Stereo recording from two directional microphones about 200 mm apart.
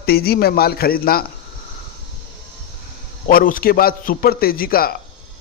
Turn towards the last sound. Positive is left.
turn(degrees=50)  # may be behind; listen again after turning